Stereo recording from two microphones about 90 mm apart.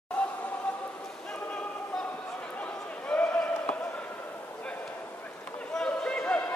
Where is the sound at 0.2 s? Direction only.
15° left (ahead or behind).